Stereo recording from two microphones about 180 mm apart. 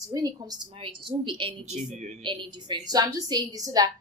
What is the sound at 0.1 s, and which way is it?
A woman's voice, 20° right (ahead or behind).